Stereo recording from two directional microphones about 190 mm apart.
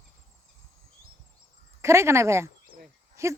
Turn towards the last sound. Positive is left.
turn(degrees=-15)  # may be behind; listen again after turning